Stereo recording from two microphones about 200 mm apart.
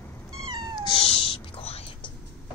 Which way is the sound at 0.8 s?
25° left (ahead or behind).